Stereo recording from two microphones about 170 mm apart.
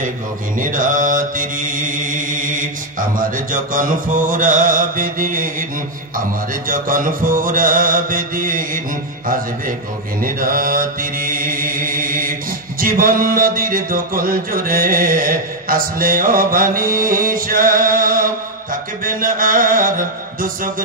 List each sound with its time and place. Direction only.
0.6 s mantra: 50° right (ahead or behind)
6.7 s mantra: 55° right (ahead or behind)
10.2 s mantra: 55° right (ahead or behind)